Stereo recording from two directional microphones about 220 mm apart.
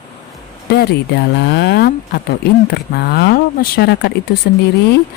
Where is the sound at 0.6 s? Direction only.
50° left (ahead or behind).